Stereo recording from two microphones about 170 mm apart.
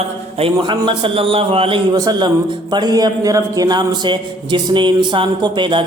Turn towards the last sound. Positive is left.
turn(degrees=-30)  # may be behind; listen again after turning